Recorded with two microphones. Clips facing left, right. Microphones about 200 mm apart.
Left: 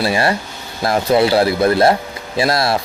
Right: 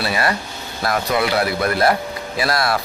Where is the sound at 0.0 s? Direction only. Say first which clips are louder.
Left 4 dB; 25° left (ahead or behind).